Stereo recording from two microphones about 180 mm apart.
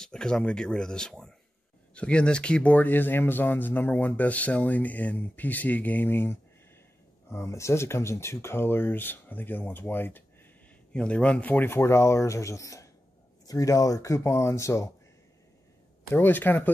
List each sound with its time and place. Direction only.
0.0 s speech: 5° left (ahead or behind)
16.1 s speech: 10° left (ahead or behind)